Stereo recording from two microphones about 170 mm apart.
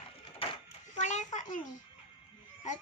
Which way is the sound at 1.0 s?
45° left (ahead or behind).